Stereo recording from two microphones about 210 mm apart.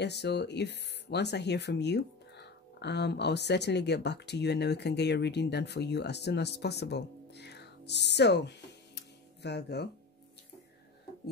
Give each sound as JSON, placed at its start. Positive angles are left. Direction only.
{"t": 0.0, "sound": "speech", "side_deg": 55}